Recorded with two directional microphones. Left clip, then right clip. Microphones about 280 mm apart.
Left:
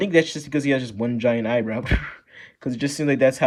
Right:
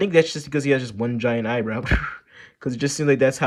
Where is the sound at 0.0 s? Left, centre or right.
Centre.